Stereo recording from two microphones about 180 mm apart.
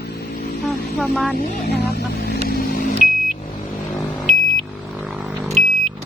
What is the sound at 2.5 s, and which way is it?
Vehicle, 55° left (ahead or behind).